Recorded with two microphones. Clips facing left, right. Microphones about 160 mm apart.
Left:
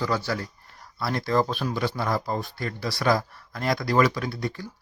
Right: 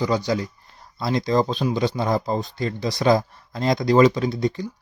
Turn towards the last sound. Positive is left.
turn(degrees=-20)  # may be behind; listen again after turning